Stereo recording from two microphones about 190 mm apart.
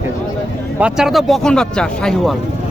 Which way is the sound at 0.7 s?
5° right (ahead or behind).